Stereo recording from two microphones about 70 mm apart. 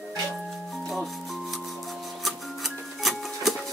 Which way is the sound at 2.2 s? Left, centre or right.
Centre.